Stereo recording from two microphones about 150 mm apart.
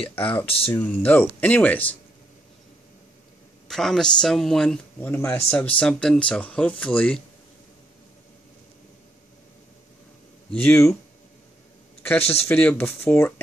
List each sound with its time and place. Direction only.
0.1 s speech: 10° left (ahead or behind)
3.6 s speech: 5° left (ahead or behind)
10.5 s speech: 10° left (ahead or behind)
12.2 s speech: 40° left (ahead or behind)
12.4 s speech: 10° left (ahead or behind)